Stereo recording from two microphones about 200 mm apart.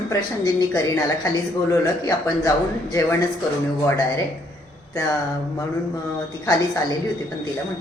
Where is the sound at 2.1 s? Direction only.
15° left (ahead or behind).